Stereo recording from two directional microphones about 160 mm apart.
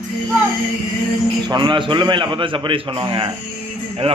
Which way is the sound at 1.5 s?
30° right (ahead or behind).